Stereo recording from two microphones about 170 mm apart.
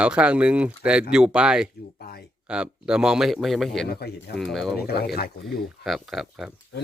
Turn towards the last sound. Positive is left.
turn(degrees=0)  # may be behind; listen again after turning